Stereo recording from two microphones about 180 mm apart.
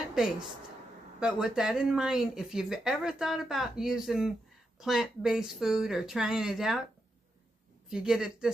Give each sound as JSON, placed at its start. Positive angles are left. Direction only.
{"t": 0.1, "sound": "a woman's voice", "side_deg": -5}
{"t": 7.9, "sound": "speech", "side_deg": -5}